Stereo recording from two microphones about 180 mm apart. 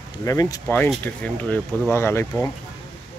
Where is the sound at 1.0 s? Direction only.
10° left (ahead or behind).